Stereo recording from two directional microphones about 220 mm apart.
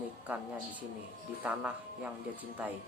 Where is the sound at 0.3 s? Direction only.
5° right (ahead or behind).